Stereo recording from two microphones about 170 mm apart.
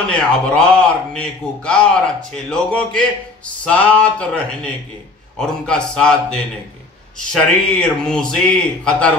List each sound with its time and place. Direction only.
0.1 s speech: 5° left (ahead or behind)